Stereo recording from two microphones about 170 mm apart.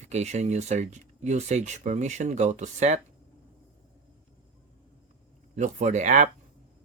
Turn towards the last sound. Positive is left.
turn(degrees=-45)  # may be behind; listen again after turning